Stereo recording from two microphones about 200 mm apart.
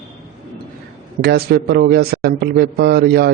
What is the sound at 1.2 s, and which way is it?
Speech, 50° right (ahead or behind).